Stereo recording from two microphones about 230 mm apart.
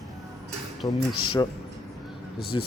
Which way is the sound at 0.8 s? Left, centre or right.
Centre.